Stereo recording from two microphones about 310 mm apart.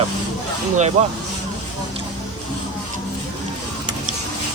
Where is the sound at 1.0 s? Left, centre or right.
Right.